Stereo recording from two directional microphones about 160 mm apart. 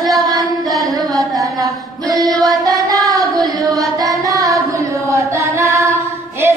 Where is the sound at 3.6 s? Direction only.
20° right (ahead or behind).